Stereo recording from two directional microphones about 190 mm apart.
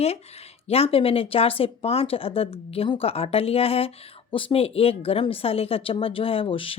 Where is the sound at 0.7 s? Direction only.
30° left (ahead or behind).